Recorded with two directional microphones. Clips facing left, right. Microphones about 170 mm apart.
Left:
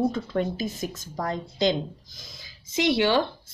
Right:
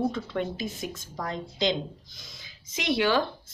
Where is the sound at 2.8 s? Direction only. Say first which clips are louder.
Left 3 dB; 25° left (ahead or behind).